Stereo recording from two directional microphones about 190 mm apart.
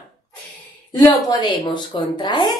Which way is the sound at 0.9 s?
20° left (ahead or behind).